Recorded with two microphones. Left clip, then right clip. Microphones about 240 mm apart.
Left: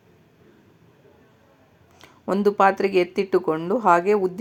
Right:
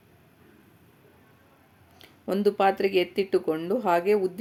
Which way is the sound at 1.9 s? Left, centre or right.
Centre.